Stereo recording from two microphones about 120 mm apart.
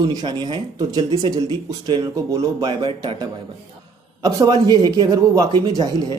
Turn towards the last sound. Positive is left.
turn(degrees=-35)  # may be behind; listen again after turning